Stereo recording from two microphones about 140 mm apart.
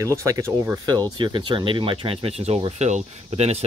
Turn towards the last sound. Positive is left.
turn(degrees=-50)  # may be behind; listen again after turning